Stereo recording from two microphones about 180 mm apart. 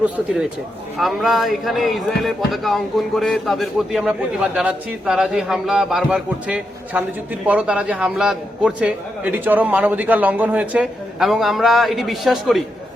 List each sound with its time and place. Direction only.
0.9 s a man's voice: centre (ahead or behind)